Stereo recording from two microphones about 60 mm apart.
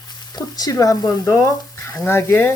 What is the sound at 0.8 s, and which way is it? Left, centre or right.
Speech, left.